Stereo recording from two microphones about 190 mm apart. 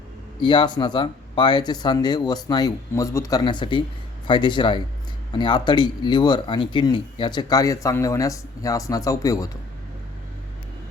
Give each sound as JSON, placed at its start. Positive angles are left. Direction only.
{"t": 0.4, "sound": "speech", "side_deg": 25}